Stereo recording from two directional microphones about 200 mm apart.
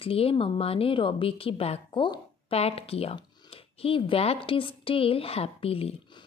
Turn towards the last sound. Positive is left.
turn(degrees=30)  # may be behind; listen again after turning